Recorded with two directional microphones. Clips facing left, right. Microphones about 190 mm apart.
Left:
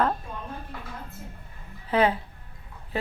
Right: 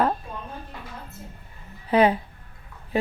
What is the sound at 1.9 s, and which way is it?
Speech, 15° right (ahead or behind).